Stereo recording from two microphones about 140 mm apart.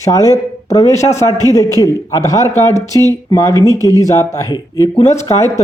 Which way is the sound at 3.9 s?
25° left (ahead or behind).